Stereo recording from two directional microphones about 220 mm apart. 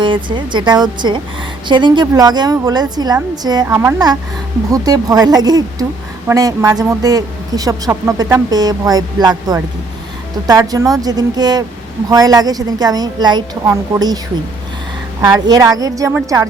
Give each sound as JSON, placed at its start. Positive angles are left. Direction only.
{"t": 0.0, "sound": "a woman's voice", "side_deg": -20}
{"t": 15.2, "sound": "a woman's voice", "side_deg": -15}